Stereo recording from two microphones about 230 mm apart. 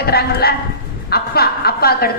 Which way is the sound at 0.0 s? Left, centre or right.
Left.